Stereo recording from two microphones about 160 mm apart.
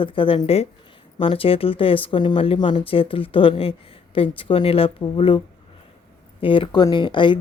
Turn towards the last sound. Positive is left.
turn(degrees=30)  # may be behind; listen again after turning